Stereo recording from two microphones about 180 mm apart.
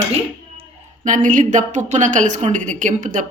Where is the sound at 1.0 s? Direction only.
45° right (ahead or behind).